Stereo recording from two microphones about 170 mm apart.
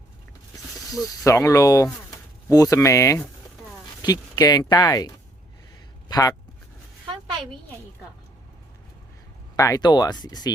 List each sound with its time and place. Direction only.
0.9 s speech: 20° left (ahead or behind)
9.6 s speech: 20° left (ahead or behind)